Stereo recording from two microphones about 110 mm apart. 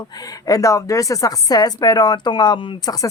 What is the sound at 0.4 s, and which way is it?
Speech, 30° left (ahead or behind).